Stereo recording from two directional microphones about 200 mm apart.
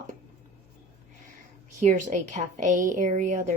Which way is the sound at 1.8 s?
40° right (ahead or behind).